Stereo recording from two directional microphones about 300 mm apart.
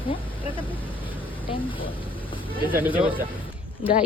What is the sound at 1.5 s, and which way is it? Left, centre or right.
Speech, centre.